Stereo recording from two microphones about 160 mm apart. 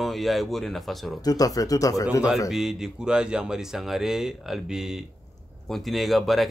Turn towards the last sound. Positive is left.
turn(degrees=0)  # may be behind; listen again after turning